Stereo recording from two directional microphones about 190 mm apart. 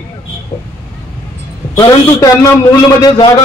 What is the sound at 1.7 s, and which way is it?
A man's voice, 20° left (ahead or behind).